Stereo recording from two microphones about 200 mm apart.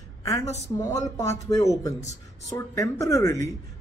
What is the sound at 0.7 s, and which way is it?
Speech, 15° left (ahead or behind).